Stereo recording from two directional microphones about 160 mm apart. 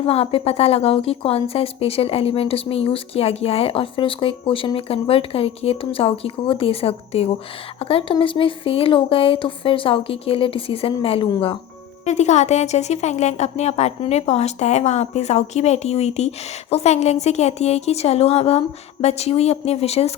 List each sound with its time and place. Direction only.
0.0 s a woman's voice: 35° left (ahead or behind)
12.0 s a woman's voice: 45° left (ahead or behind)